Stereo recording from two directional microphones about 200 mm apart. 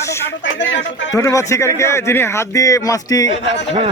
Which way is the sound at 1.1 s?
15° left (ahead or behind).